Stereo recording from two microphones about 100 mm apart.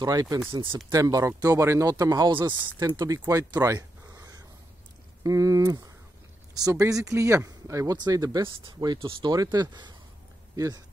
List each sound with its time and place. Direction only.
0.0 s speech: 40° right (ahead or behind)
0.5 s speech: 55° right (ahead or behind)
0.9 s speech: 35° right (ahead or behind); by 2.7 s 50° right (ahead or behind)
3.1 s a sound: 35° right (ahead or behind)
5.2 s speech: 35° right (ahead or behind)
8.0 s speech: 40° right (ahead or behind)
10.5 s speech: 35° right (ahead or behind)